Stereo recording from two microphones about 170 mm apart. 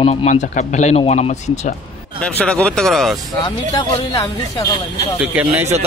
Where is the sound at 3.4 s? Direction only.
20° left (ahead or behind).